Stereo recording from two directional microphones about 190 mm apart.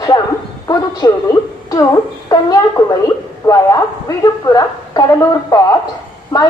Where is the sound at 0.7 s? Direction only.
20° left (ahead or behind).